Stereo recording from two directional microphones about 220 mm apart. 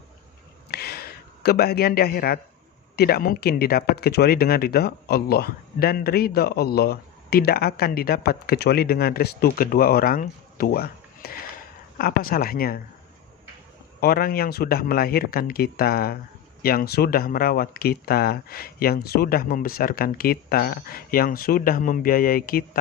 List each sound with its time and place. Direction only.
0.7 s a sound: 45° left (ahead or behind)
2.9 s speech: 45° left (ahead or behind)
14.0 s speech: 45° left (ahead or behind)